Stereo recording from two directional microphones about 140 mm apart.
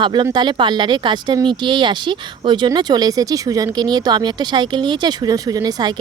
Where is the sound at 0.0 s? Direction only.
35° right (ahead or behind).